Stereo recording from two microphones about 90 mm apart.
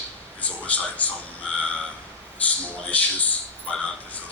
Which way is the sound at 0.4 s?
15° left (ahead or behind).